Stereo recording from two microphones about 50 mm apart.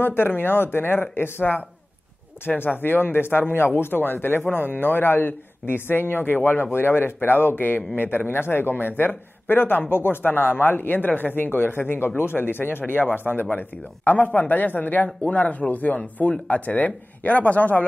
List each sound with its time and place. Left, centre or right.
0.0 s speech: left